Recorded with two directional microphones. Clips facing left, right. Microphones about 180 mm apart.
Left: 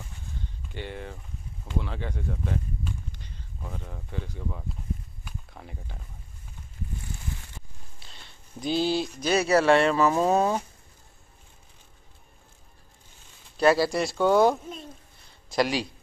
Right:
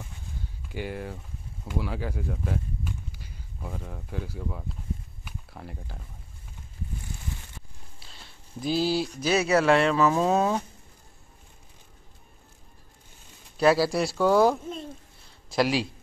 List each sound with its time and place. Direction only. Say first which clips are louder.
0.4 s speech: right 4 dB; 5° right (ahead or behind)
5.2 s a sound: right 2 dB; 5° right (ahead or behind)
8.0 s speech: even; 5° right (ahead or behind)
13.6 s speech: even; centre (ahead or behind)